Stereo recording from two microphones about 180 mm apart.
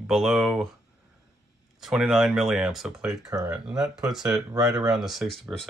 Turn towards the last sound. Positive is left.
turn(degrees=0)  # may be behind; listen again after turning